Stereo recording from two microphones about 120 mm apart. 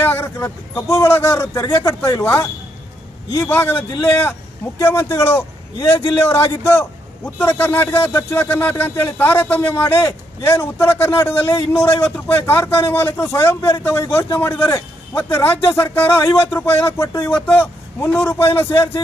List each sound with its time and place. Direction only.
0.0 s a man's voice: 20° left (ahead or behind)